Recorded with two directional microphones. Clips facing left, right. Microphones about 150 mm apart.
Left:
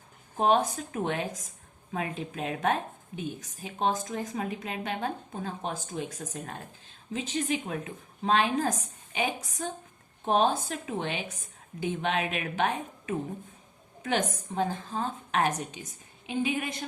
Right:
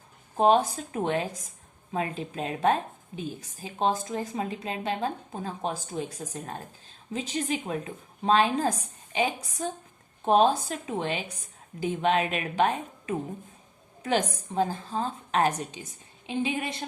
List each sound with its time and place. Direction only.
0.3 s a woman's voice: 35° right (ahead or behind)